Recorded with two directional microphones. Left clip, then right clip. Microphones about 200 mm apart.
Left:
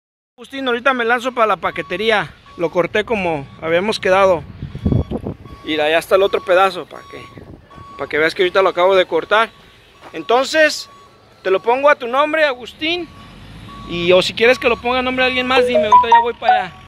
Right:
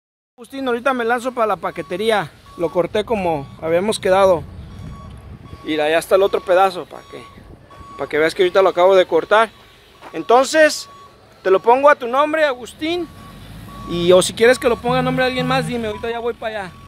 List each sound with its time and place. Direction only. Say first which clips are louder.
0.4 s speech: left 2 dB; centre (ahead or behind)
5.7 s speech: left 1 dB; 5° right (ahead or behind)
8.0 s speech: even; 10° right (ahead or behind)
12.1 s speech: left 1 dB; 5° right (ahead or behind)